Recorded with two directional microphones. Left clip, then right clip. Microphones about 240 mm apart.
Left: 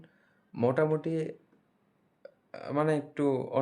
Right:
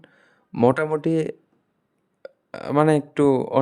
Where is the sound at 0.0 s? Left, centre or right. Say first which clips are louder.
Right 8 dB; right.